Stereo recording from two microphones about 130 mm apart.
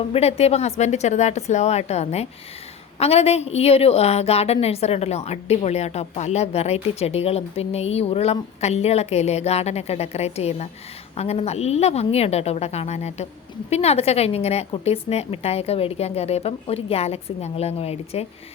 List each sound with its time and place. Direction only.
0.1 s a woman's voice: 55° left (ahead or behind)